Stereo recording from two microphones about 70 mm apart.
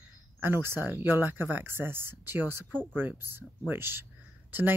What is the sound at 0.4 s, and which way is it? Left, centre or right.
Speech, right.